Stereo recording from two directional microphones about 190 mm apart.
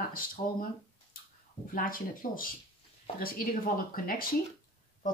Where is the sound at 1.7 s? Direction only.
50° left (ahead or behind).